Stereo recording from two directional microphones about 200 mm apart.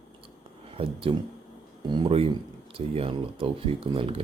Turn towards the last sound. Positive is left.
turn(degrees=-25)  # may be behind; listen again after turning